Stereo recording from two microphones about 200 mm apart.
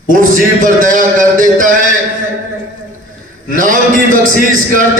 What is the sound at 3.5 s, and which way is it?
Speech, 40° right (ahead or behind).